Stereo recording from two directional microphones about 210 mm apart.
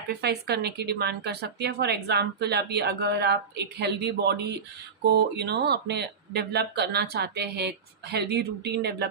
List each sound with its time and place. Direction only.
0.1 s speech: 50° right (ahead or behind)